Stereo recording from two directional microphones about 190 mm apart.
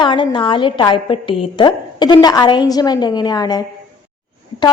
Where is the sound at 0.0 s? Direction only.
25° left (ahead or behind).